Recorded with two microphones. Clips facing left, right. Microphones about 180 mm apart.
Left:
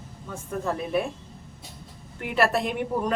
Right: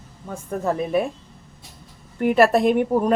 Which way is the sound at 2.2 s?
45° right (ahead or behind).